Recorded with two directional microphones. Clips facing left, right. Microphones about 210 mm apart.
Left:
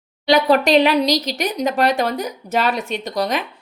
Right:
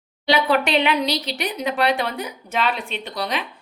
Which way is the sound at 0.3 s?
40° left (ahead or behind).